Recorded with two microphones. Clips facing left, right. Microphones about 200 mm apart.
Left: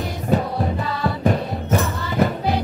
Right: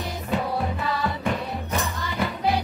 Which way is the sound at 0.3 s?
40° left (ahead or behind).